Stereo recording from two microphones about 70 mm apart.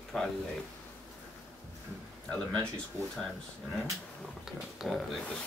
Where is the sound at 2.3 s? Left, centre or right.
Centre.